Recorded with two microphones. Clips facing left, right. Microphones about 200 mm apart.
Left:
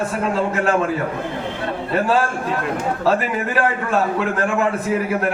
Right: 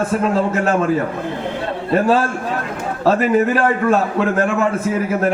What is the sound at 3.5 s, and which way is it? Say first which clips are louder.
Speech: right 4 dB; 40° right (ahead or behind).